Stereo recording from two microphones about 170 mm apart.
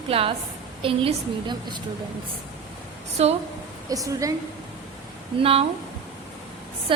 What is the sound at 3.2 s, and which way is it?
Speech, 35° right (ahead or behind).